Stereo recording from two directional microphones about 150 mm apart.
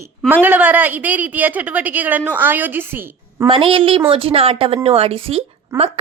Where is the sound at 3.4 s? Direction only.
35° right (ahead or behind).